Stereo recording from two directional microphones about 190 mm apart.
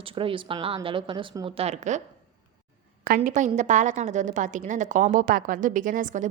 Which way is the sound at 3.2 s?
40° right (ahead or behind).